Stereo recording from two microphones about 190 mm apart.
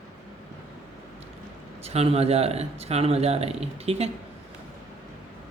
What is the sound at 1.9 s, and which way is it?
Speech, 30° right (ahead or behind).